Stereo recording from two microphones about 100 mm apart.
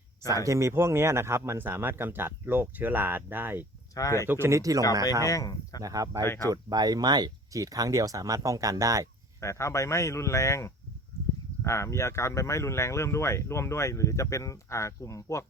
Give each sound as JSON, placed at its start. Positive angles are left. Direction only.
{"t": 0.3, "sound": "speech", "side_deg": -30}
{"t": 3.9, "sound": "speech", "side_deg": 30}
{"t": 4.3, "sound": "speech", "side_deg": -25}
{"t": 5.2, "sound": "speech", "side_deg": 35}
{"t": 5.8, "sound": "speech", "side_deg": -35}
{"t": 9.4, "sound": "speech", "side_deg": 30}